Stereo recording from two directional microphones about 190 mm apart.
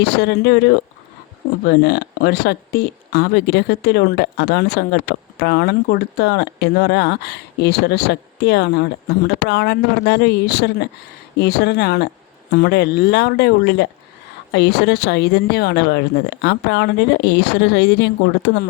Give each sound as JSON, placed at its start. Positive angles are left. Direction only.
{"t": 0.0, "sound": "speech", "side_deg": 60}